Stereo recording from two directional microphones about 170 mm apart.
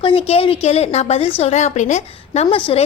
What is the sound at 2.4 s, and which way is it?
Speech, 30° left (ahead or behind).